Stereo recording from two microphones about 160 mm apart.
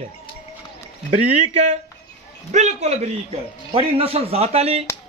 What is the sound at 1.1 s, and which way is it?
A man's voice, 45° right (ahead or behind).